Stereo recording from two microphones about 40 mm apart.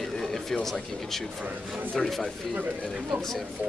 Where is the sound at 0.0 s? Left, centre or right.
Centre.